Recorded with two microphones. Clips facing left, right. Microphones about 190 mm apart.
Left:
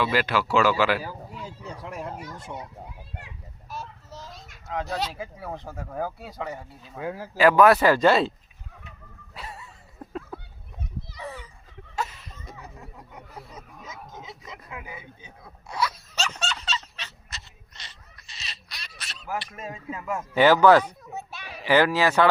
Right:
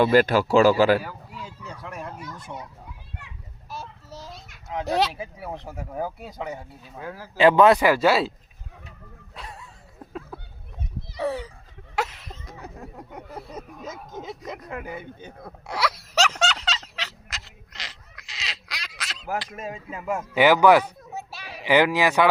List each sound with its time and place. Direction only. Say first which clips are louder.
0.0 s speech: right 6 dB; 45° right (ahead or behind)
2.1 s fowl: even; 25° left (ahead or behind)
5.1 s speech: right 1 dB; 15° right (ahead or behind)
7.0 s speech: left 4 dB; 20° left (ahead or behind)
7.3 s speech: right 1 dB; 25° right (ahead or behind); by 8.3 s 5° right (ahead or behind)
9.3 s bow-wow: left 1 dB; 5° left (ahead or behind)
10.1 s a sound: left 1 dB; centre (ahead or behind)
11.2 s a child's voice: right 12 dB; 80° right
11.9 s a sound: right 4 dB; 90° right
13.6 s speech: right 6 dB; 55° right (ahead or behind)
14.9 s a sound: right 7 dB; 60° right (ahead or behind); by 18.9 s 90° right
18.9 s quack: right 6 dB; 90° right
19.5 s speech: right 1 dB; 15° right (ahead or behind)